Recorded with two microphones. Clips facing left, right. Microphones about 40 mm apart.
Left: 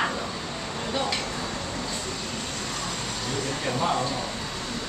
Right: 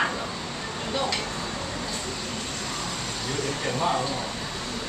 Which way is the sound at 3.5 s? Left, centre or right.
Centre.